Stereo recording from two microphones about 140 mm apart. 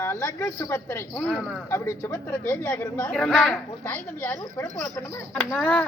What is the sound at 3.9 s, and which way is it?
Speech, 15° left (ahead or behind).